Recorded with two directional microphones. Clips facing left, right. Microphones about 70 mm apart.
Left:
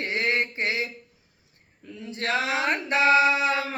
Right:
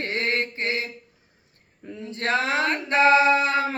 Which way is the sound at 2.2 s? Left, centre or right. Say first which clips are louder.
Right 2 dB; right.